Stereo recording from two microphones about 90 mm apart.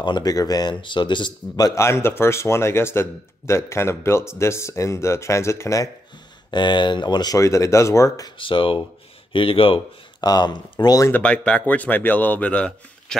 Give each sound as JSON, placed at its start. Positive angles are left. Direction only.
{"t": 0.2, "sound": "speech", "side_deg": 45}
{"t": 0.7, "sound": "speech", "side_deg": 60}
{"t": 1.8, "sound": "speech", "side_deg": 30}
{"t": 6.5, "sound": "speech", "side_deg": 60}
{"t": 7.3, "sound": "speech", "side_deg": 35}
{"t": 8.4, "sound": "speech", "side_deg": 70}
{"t": 9.3, "sound": "speech", "side_deg": 85}
{"t": 10.2, "sound": "speech", "side_deg": 50}
{"t": 11.2, "sound": "speech", "side_deg": 10}